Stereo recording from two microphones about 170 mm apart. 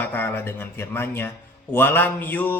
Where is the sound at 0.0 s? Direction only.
10° left (ahead or behind).